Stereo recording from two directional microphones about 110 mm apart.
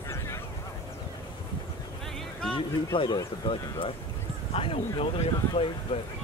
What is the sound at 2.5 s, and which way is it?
Speech, 50° left (ahead or behind).